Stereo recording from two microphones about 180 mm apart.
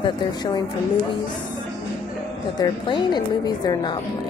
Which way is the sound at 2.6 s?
25° left (ahead or behind).